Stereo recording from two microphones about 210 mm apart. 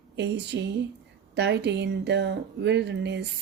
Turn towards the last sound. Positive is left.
turn(degrees=-55)  # may be behind; listen again after turning